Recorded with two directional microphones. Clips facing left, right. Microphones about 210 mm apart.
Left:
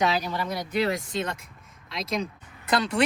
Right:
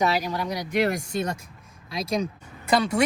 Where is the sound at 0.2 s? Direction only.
10° right (ahead or behind).